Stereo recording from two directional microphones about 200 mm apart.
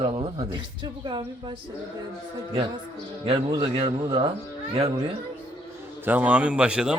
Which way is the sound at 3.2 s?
25° right (ahead or behind).